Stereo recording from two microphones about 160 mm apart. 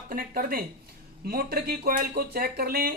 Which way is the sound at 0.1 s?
60° right (ahead or behind).